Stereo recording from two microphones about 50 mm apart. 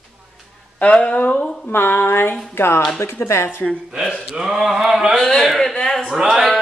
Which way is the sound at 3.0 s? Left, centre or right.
Left.